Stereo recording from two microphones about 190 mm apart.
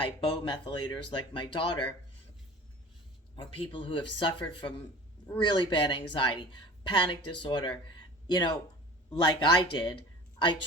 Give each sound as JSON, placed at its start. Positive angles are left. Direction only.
{"t": 0.6, "sound": "a woman's voice", "side_deg": 25}
{"t": 3.3, "sound": "a woman's voice", "side_deg": 25}
{"t": 10.3, "sound": "a sound", "side_deg": 25}